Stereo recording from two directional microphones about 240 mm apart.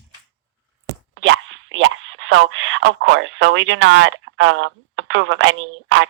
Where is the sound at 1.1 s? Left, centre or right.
Right.